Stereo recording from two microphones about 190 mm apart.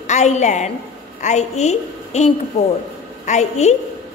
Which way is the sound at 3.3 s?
35° left (ahead or behind).